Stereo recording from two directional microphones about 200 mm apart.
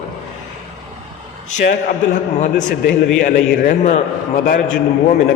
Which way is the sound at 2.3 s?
40° left (ahead or behind).